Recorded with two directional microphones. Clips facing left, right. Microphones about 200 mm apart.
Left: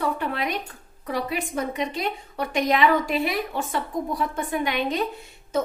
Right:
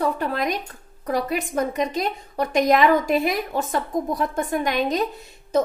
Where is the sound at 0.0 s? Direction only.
40° right (ahead or behind).